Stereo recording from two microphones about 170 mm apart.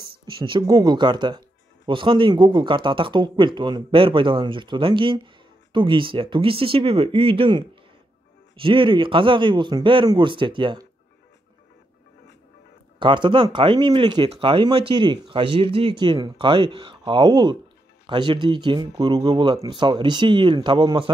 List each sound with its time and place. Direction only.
0.2 s speech: 25° right (ahead or behind)
13.0 s speech: 30° right (ahead or behind)